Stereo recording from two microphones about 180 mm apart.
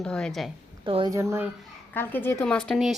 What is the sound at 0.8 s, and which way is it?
Speech, 30° right (ahead or behind).